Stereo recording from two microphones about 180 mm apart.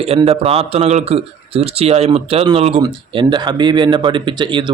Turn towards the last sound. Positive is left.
turn(degrees=-25)  # may be behind; listen again after turning